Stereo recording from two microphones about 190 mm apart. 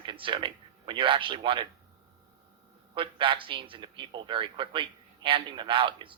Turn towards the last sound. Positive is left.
turn(degrees=-25)  # may be behind; listen again after turning